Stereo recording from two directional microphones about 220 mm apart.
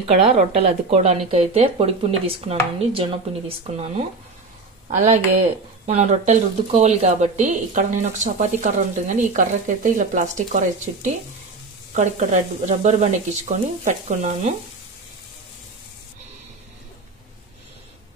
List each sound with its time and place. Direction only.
0.0 s speech: 30° right (ahead or behind)